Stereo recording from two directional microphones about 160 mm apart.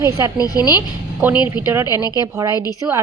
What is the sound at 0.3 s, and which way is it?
Speech, 25° left (ahead or behind).